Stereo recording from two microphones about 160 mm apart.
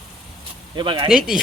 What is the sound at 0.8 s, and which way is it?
Speech, 30° right (ahead or behind).